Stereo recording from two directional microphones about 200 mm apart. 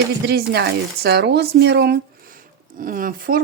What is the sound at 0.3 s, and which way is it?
Speech, 55° right (ahead or behind).